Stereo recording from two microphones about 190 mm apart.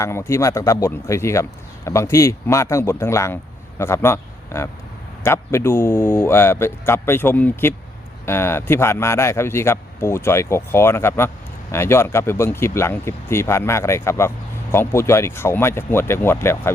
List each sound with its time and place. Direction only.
0.0 s a man's voice: 15° left (ahead or behind)